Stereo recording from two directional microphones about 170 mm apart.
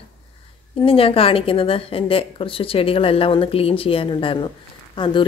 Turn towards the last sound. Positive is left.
turn(degrees=30)  # may be behind; listen again after turning